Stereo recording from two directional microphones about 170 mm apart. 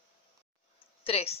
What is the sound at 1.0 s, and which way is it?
Speech, 35° left (ahead or behind).